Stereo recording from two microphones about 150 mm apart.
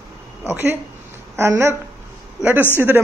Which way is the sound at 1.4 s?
20° right (ahead or behind).